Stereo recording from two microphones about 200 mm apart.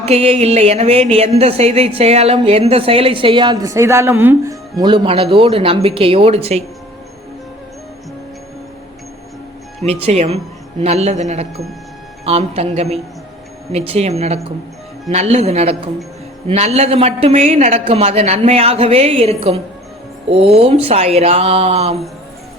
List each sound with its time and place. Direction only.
0.0 s speech: 30° right (ahead or behind); by 4.5 s 10° right (ahead or behind)
4.8 s speech: 25° right (ahead or behind)
9.8 s a man's voice: 30° right (ahead or behind)